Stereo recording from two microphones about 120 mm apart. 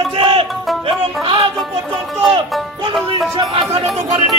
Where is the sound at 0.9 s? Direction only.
45° right (ahead or behind).